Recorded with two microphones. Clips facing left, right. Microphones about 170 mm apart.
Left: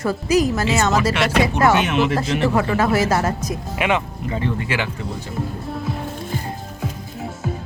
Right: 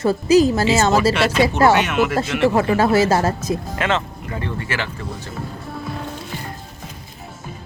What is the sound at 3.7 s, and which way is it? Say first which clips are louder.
Speech: left 1 dB; 15° left (ahead or behind).